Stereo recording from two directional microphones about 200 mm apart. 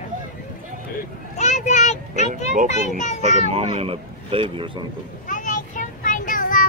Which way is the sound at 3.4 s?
30° right (ahead or behind).